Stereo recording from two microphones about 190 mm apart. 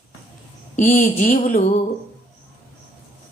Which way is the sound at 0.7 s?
45° left (ahead or behind).